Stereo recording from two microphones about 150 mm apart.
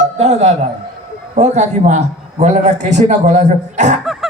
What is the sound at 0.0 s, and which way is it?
A man's voice, 45° right (ahead or behind).